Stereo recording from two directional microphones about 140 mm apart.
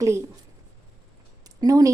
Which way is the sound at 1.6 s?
25° right (ahead or behind).